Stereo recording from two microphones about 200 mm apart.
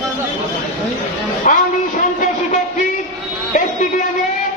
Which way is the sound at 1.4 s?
40° left (ahead or behind).